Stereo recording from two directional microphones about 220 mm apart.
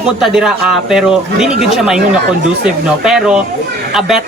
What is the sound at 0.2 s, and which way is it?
Speech, centre (ahead or behind).